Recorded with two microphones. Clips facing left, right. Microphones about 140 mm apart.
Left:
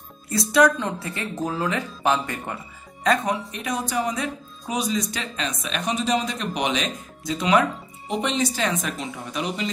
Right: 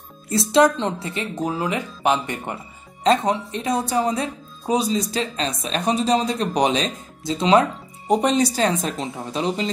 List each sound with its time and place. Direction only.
0.3 s speech: 25° right (ahead or behind)
8.1 s speech: 40° right (ahead or behind)